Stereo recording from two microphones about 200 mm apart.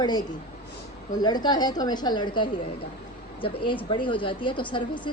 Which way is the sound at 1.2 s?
20° left (ahead or behind).